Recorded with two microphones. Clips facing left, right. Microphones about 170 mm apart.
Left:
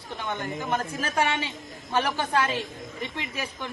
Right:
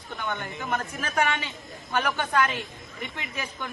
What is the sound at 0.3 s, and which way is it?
A woman's voice, 30° left (ahead or behind).